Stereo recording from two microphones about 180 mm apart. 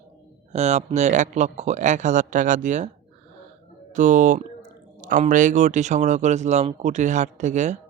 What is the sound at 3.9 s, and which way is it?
Speech, 45° right (ahead or behind).